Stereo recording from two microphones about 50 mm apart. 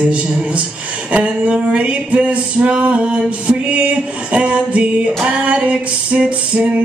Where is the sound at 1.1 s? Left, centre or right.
Right.